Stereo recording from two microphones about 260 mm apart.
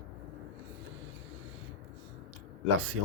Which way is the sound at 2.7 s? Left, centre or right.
Right.